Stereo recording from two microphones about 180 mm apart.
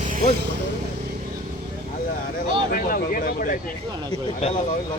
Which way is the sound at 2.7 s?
50° left (ahead or behind).